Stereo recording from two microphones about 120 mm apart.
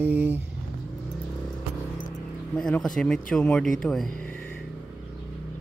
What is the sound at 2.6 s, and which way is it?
Speech, 5° left (ahead or behind).